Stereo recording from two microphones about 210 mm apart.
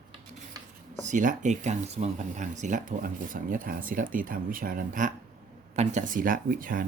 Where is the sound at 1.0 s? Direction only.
35° right (ahead or behind).